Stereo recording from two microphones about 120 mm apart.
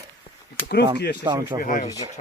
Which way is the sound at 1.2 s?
30° right (ahead or behind).